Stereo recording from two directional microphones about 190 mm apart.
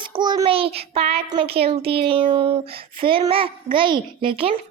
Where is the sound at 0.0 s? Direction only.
20° right (ahead or behind).